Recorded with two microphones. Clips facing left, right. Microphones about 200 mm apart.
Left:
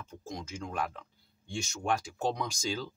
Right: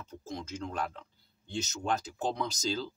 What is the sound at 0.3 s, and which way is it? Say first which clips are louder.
Speech: right 1 dB; 10° left (ahead or behind).